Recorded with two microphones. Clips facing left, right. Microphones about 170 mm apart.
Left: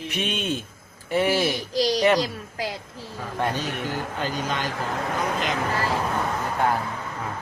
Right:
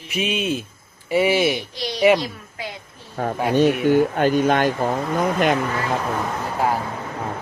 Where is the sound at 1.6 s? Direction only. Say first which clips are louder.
Left 6 dB; 40° left (ahead or behind).